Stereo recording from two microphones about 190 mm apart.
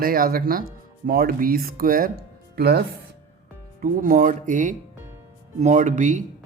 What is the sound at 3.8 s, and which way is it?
Speech, 45° right (ahead or behind).